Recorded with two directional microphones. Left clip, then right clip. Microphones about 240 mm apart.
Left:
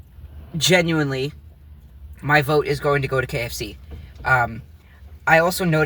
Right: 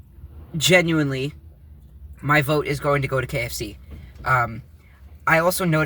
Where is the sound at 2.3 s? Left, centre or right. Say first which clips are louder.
Left 2 dB; centre.